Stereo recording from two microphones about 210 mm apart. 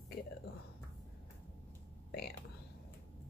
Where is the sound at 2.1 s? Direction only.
50° left (ahead or behind).